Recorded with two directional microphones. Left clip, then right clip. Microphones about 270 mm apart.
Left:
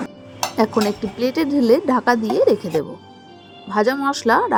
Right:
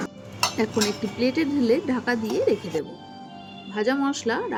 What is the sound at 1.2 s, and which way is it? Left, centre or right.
Speech, centre.